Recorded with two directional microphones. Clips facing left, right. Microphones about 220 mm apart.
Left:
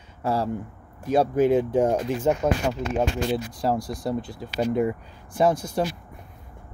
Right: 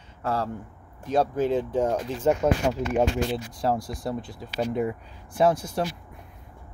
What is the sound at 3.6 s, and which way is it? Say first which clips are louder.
Speech: left 1 dB; centre (ahead or behind).